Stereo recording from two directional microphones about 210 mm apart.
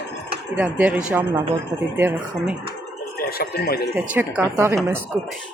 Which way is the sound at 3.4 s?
50° left (ahead or behind).